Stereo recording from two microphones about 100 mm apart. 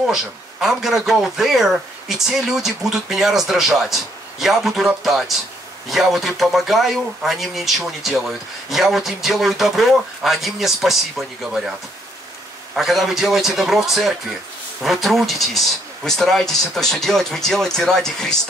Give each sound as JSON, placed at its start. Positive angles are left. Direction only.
{"t": 0.0, "sound": "speech", "side_deg": -5}
{"t": 12.7, "sound": "speech", "side_deg": 0}